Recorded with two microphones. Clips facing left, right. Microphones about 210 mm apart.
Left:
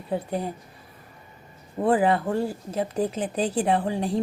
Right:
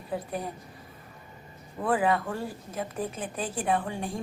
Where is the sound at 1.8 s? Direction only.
30° left (ahead or behind).